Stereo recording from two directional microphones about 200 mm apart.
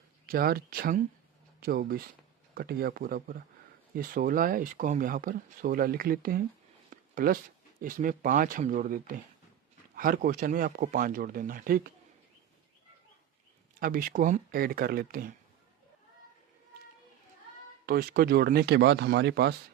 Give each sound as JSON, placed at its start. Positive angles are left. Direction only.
{"t": 0.3, "sound": "speech", "side_deg": -50}
{"t": 6.9, "sound": "a sound", "side_deg": -45}
{"t": 7.8, "sound": "speech", "side_deg": -45}
{"t": 13.7, "sound": "speech", "side_deg": -45}
{"t": 17.8, "sound": "speech", "side_deg": -50}